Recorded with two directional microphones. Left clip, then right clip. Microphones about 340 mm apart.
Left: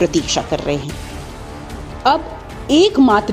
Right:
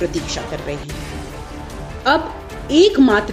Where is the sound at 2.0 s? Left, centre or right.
Left.